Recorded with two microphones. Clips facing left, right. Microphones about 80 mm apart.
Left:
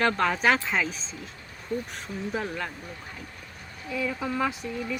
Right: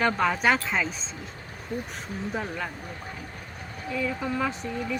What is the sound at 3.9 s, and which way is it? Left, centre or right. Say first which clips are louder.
Speech: even; centre.